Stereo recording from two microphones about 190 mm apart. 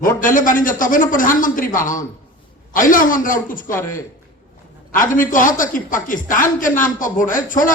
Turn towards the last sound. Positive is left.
turn(degrees=45)  # may be behind; listen again after turning